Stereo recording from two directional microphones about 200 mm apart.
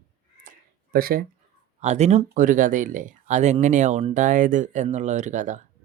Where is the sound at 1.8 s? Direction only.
35° right (ahead or behind).